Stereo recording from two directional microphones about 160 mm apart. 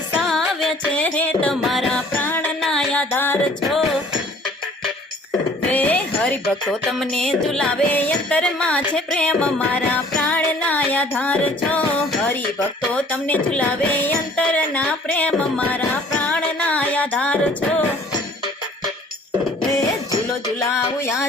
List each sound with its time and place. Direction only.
0.2 s music: centre (ahead or behind)
3.6 s music: centre (ahead or behind)
5.7 s music: 10° left (ahead or behind)
20.7 s a sound: 20° left (ahead or behind)